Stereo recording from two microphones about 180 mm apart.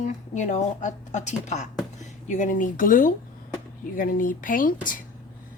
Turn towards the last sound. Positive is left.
turn(degrees=50)  # may be behind; listen again after turning